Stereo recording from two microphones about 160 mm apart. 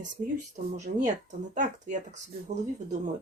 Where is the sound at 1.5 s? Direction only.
50° right (ahead or behind).